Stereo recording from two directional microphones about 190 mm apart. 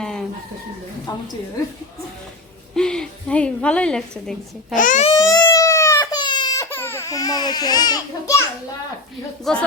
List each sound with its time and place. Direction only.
0.0 s chicken: 5° left (ahead or behind)
1.1 s a woman's voice: 20° left (ahead or behind)
2.7 s speech: 5° left (ahead or behind)
4.7 s speech: 45° left (ahead or behind)
5.3 s baby cry: 20° left (ahead or behind)
9.5 s speech: centre (ahead or behind)